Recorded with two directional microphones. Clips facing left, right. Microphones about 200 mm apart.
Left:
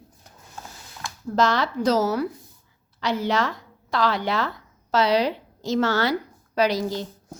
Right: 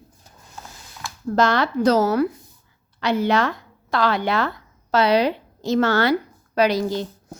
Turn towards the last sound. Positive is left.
turn(degrees=-60)  # may be behind; listen again after turning